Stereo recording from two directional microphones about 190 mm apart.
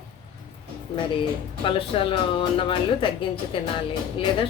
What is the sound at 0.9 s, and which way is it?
Speech, 25° left (ahead or behind).